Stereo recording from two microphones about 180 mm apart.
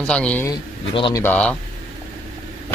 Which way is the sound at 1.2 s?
5° left (ahead or behind).